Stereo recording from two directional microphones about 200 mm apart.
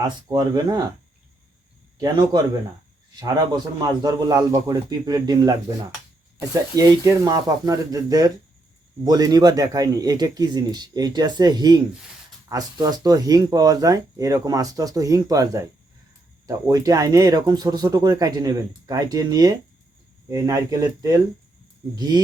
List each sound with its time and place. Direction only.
0.0 s speech: 20° right (ahead or behind)
2.0 s speech: 20° right (ahead or behind)